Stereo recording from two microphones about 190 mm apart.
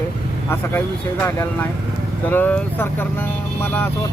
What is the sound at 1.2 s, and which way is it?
Speech, 10° left (ahead or behind).